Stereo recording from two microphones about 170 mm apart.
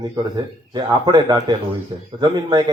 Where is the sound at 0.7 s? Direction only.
25° right (ahead or behind).